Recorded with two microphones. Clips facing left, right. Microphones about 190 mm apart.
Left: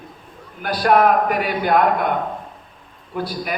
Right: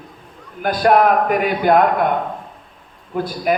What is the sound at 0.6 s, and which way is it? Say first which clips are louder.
A man's voice: right 2 dB; 50° right (ahead or behind).